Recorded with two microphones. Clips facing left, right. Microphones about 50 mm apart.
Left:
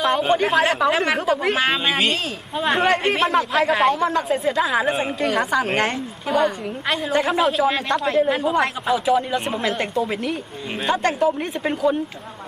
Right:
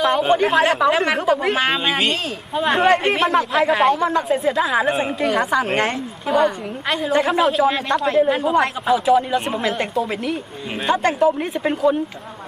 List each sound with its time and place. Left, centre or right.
0.2 s speech: centre
0.4 s a man's voice: centre